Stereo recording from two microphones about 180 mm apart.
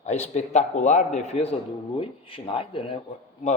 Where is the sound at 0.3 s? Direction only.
40° left (ahead or behind).